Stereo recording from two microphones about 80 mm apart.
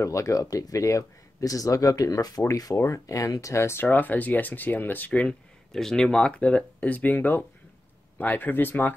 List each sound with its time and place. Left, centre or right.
0.0 s speech: left
3.8 s speech: left